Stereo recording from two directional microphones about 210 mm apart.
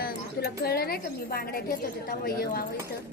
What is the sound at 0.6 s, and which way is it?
A woman's voice, 45° left (ahead or behind).